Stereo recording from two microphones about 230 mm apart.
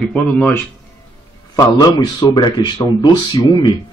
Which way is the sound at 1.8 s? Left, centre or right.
Centre.